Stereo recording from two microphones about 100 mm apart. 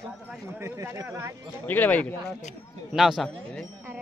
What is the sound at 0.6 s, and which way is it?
Speech, 30° right (ahead or behind).